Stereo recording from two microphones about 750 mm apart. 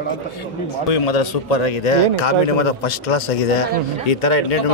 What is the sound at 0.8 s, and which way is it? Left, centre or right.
A man's voice, left.